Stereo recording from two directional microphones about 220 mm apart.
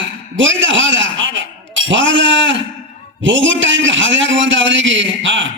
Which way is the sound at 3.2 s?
60° right (ahead or behind).